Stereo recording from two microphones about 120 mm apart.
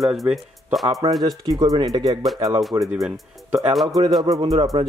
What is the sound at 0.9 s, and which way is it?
Speech, 30° right (ahead or behind).